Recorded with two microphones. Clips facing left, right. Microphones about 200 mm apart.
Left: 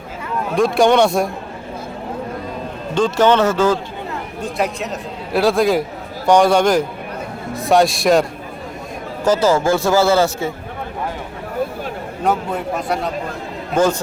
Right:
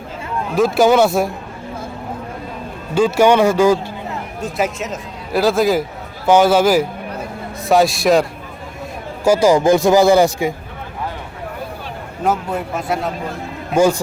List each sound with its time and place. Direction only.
0.5 s a man's voice: centre (ahead or behind)
2.9 s speech: 10° right (ahead or behind)
4.4 s a man's voice: centre (ahead or behind)
9.2 s speech: 10° right (ahead or behind)
12.2 s a man's voice: centre (ahead or behind)